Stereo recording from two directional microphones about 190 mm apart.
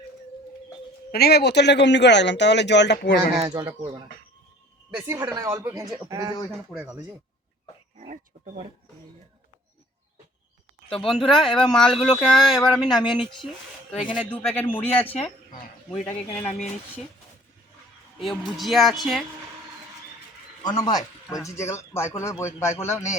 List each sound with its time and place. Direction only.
1.1 s speech: 55° left (ahead or behind)
3.4 s speech: 20° right (ahead or behind)
6.5 s speech: 5° right (ahead or behind)
7.9 s speech: 40° right (ahead or behind)
11.1 s a man's voice: centre (ahead or behind)
15.9 s speech: 25° left (ahead or behind)
18.2 s speech: centre (ahead or behind)
20.8 s a man's voice: 20° left (ahead or behind)